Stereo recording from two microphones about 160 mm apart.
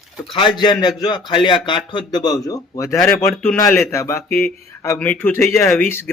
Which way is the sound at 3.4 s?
15° left (ahead or behind).